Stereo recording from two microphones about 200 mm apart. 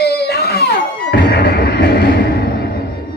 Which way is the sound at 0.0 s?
55° left (ahead or behind).